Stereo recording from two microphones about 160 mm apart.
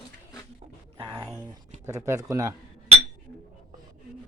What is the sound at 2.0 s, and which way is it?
Speech, 15° right (ahead or behind).